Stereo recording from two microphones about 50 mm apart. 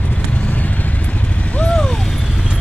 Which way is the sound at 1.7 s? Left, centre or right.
Centre.